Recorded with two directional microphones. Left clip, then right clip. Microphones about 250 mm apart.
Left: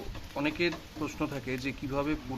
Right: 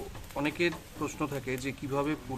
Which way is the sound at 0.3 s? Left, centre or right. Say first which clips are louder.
Even; centre.